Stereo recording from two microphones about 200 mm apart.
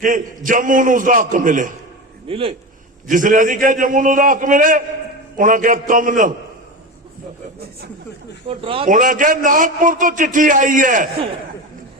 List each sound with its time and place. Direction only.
0.0 s a man's voice: 40° right (ahead or behind)
2.2 s speech: 25° right (ahead or behind)
3.1 s a man's voice: 40° right (ahead or behind)
8.4 s speech: 25° right (ahead or behind)
8.9 s a man's voice: 40° right (ahead or behind)